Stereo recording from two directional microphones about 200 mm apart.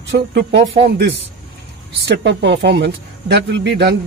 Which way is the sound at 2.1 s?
60° right (ahead or behind).